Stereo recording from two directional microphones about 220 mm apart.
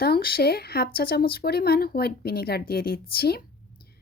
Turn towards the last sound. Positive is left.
turn(degrees=45)  # may be behind; listen again after turning